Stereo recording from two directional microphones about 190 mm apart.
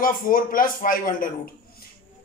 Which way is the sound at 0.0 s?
45° left (ahead or behind).